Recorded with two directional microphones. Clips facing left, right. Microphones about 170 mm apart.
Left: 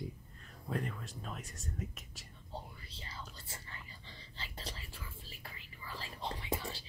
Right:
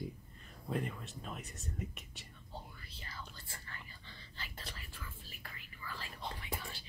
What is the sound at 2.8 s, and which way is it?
Whispering, 25° left (ahead or behind).